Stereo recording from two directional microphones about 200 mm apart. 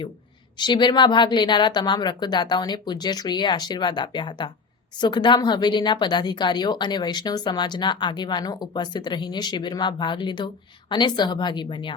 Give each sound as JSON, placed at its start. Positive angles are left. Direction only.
{"t": 0.6, "sound": "speech", "side_deg": 20}